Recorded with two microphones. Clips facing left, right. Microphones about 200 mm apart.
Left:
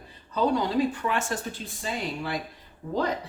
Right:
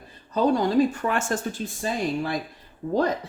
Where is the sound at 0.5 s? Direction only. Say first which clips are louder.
Right 4 dB; 45° right (ahead or behind).